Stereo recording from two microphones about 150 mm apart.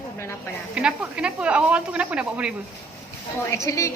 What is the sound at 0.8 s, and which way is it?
Speech, 5° right (ahead or behind).